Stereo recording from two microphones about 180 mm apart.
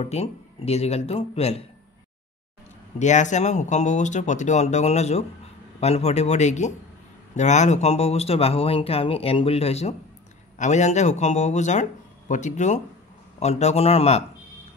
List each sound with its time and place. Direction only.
0.0 s speech: 35° left (ahead or behind)
3.0 s speech: 40° left (ahead or behind)